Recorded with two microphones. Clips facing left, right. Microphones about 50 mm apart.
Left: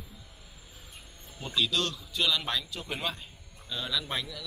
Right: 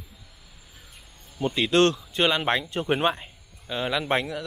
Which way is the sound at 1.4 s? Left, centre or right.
Right.